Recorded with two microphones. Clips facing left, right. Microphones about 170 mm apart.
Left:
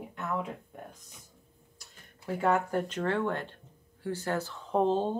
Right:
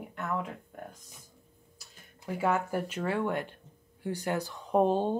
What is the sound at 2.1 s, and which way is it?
A woman's voice, 10° right (ahead or behind).